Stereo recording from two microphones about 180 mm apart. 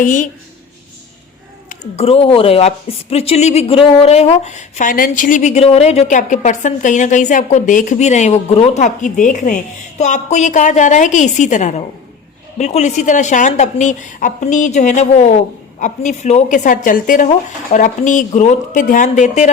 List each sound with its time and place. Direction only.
0.0 s speech: 45° left (ahead or behind)
2.0 s a woman's voice: 35° left (ahead or behind)